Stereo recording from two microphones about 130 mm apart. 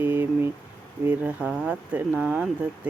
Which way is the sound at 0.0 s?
15° right (ahead or behind).